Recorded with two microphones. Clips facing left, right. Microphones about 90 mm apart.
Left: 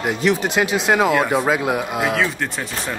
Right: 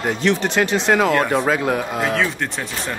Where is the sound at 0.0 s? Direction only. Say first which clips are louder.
Even; 5° left (ahead or behind).